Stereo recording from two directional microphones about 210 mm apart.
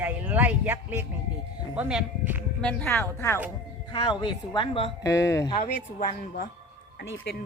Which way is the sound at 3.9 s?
25° left (ahead or behind).